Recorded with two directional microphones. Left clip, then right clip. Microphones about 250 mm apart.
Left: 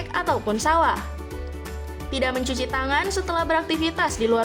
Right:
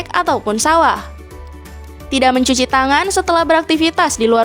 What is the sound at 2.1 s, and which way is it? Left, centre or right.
Speech, right.